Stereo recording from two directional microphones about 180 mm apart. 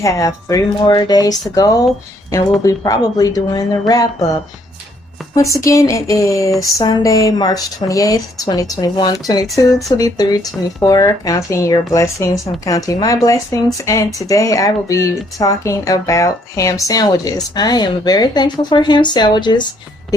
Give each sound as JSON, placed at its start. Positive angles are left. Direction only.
{"t": 0.0, "sound": "speech", "side_deg": 15}
{"t": 5.3, "sound": "speech", "side_deg": 20}